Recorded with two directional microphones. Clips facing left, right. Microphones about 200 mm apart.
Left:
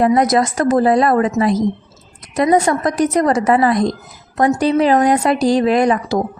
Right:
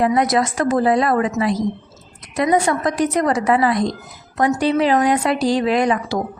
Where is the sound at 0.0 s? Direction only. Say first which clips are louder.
Left 3 dB; 45° left (ahead or behind).